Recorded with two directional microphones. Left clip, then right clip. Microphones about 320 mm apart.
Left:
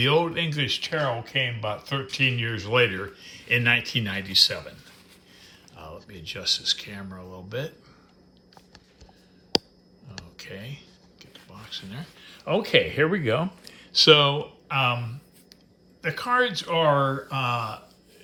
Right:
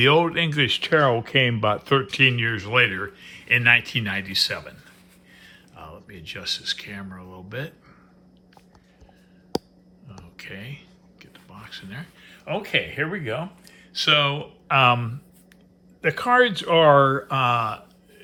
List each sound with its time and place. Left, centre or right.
0.0 s speech: centre
5.4 s a sound: centre
6.1 s speech: centre
9.5 s a sound: right
10.5 s speech: centre
16.0 s speech: centre